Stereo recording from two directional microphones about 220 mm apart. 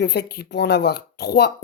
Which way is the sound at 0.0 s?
50° left (ahead or behind).